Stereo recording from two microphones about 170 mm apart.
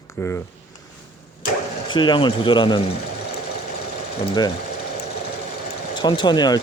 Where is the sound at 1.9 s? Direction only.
30° left (ahead or behind).